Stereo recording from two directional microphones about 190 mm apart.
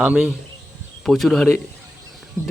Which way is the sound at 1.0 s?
Centre (ahead or behind).